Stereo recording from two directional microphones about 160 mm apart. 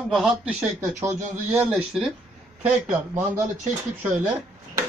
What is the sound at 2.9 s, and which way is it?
Speech, 15° right (ahead or behind).